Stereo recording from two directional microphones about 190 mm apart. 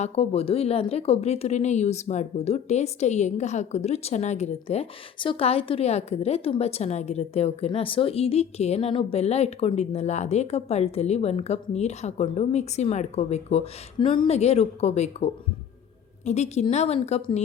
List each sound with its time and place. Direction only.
0.0 s a woman's voice: 30° left (ahead or behind)